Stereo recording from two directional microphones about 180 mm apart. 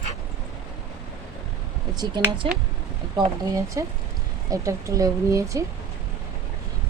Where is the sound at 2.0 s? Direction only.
25° right (ahead or behind).